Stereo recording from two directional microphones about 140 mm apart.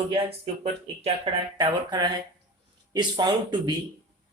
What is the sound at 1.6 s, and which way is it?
Speech, 30° right (ahead or behind).